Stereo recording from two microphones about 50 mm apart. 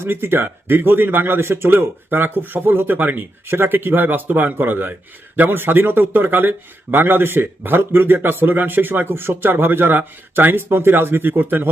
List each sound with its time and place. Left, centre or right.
0.0 s a man's voice: right
3.4 s a man's voice: right